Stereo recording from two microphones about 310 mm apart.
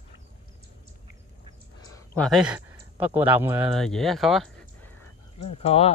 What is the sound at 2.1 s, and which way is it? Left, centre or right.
Speech, centre.